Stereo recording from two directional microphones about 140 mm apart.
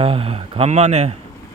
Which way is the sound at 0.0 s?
40° right (ahead or behind).